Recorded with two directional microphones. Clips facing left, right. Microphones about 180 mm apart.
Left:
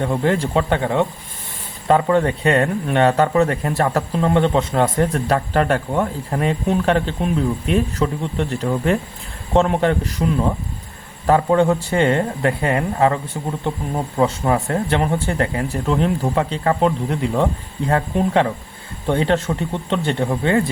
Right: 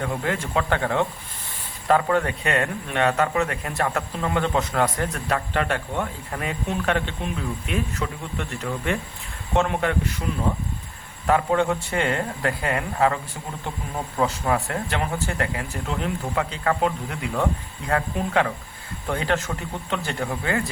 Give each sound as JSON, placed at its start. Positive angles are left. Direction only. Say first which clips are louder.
{"t": 0.0, "sound": "a man's voice", "louder": "left 7 dB", "side_deg": 35}
{"t": 11.3, "sound": "a man's voice", "louder": "left 5 dB", "side_deg": 30}